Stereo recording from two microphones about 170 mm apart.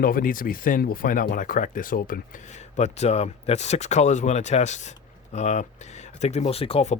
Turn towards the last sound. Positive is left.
turn(degrees=40)  # may be behind; listen again after turning